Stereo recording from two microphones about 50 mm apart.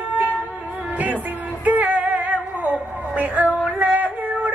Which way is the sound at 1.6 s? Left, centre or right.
Right.